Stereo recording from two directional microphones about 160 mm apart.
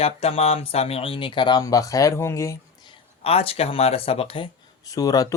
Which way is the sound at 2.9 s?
35° left (ahead or behind).